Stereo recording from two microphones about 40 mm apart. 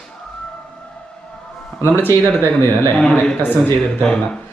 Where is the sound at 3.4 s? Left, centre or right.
Left.